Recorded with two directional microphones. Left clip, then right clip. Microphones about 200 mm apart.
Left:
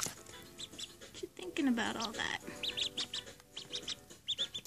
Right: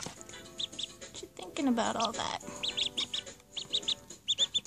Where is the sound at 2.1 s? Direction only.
25° right (ahead or behind).